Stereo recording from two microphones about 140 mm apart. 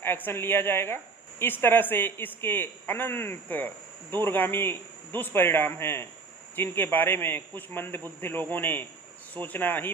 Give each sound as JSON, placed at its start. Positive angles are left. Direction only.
{"t": 0.0, "sound": "a man's voice", "side_deg": 15}